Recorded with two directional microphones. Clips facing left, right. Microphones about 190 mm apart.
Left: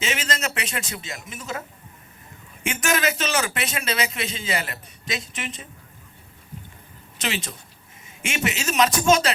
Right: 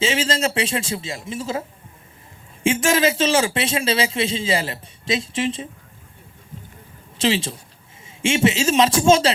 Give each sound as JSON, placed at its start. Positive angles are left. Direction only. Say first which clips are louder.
{"t": 0.0, "sound": "a man's voice", "louder": "right 7 dB", "side_deg": -30}
{"t": 2.6, "sound": "a man's voice", "louder": "right 6 dB", "side_deg": -30}
{"t": 7.2, "sound": "a man's voice", "louder": "right 9 dB", "side_deg": -30}